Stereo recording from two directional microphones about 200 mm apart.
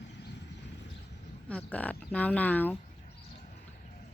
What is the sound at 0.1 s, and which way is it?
Vehicle, 55° left (ahead or behind).